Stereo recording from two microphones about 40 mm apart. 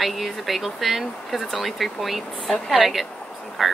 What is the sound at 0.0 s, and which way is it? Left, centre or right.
A woman's voice, centre.